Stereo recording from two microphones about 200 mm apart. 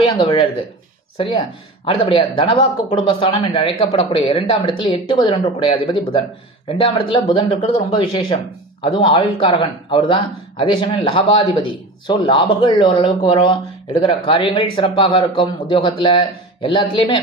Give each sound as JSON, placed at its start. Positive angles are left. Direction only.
{"t": 0.0, "sound": "speech", "side_deg": 20}